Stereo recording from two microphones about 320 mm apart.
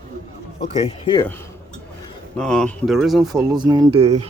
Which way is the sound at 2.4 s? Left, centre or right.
Centre.